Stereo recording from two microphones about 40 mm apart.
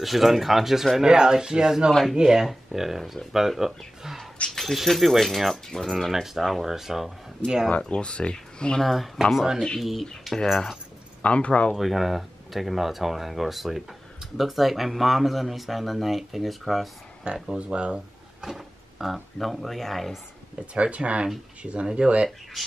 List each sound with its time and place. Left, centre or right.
0.0 s speech: centre
1.0 s speech: centre
4.5 s speech: centre
7.8 s speech: left
8.8 s speech: centre
11.2 s speech: left
11.7 s speech: centre
17.2 s speech: right
18.4 s a sound: centre
19.3 s speech: centre
20.7 s speech: right